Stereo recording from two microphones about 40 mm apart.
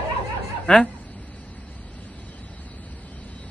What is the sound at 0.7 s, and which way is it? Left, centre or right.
Speech, left.